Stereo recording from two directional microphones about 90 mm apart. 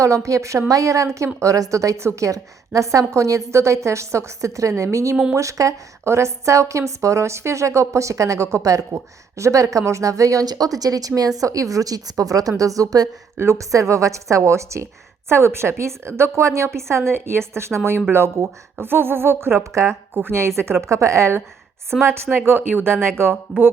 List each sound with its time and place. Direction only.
0.0 s a woman's voice: 35° right (ahead or behind)
13.3 s a woman's voice: 30° right (ahead or behind)